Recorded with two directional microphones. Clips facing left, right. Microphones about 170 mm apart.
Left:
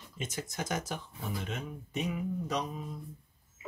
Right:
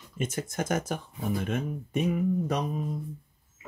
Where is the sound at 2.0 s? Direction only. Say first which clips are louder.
Right 9 dB; 55° right (ahead or behind).